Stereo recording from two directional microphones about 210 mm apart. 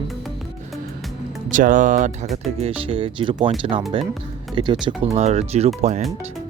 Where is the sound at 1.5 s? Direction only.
40° right (ahead or behind).